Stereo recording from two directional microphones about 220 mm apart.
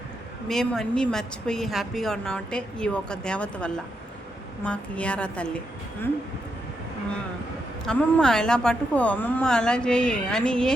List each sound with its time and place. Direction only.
0.4 s a woman's voice: centre (ahead or behind)
7.9 s a woman's voice: 5° left (ahead or behind)